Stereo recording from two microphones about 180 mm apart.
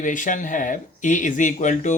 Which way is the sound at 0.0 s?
45° left (ahead or behind).